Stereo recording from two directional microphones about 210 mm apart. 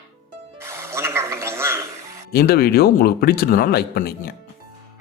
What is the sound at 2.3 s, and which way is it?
A man's voice, 45° left (ahead or behind).